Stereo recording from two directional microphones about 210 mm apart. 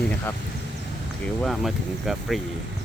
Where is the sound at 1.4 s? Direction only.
Centre (ahead or behind).